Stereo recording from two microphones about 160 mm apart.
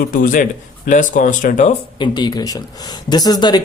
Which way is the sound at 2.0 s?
25° left (ahead or behind).